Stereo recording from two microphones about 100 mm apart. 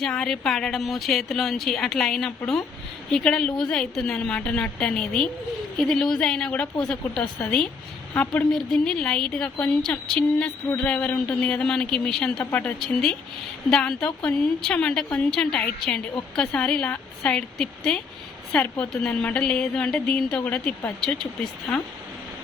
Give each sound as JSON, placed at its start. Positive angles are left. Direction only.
{"t": 0.0, "sound": "a woman's voice", "side_deg": 5}
{"t": 12.4, "sound": "a woman's voice", "side_deg": 20}
{"t": 12.8, "sound": "a woman's voice", "side_deg": 5}